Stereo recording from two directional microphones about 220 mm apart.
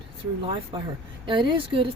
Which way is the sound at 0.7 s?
20° right (ahead or behind).